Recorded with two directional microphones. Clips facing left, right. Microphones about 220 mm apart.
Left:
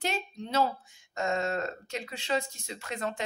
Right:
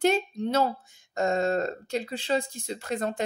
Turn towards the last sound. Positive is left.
turn(degrees=-35)  # may be behind; listen again after turning